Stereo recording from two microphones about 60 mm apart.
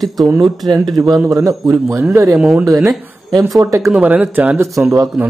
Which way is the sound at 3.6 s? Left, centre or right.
Right.